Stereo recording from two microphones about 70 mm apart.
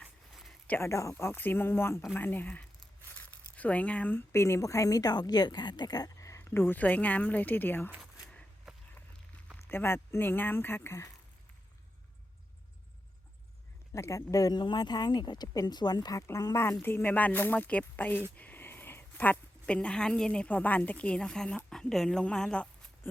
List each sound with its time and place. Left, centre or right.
0.8 s speech: left
1.1 s speech: left
3.1 s crumpling: left
4.3 s speech: left
6.1 s a sound: left
6.4 s speech: left
8.7 s walk: centre
9.6 s speech: left
13.9 s speech: left
14.5 s speech: left
16.1 s a woman's voice: left; by 22.9 s centre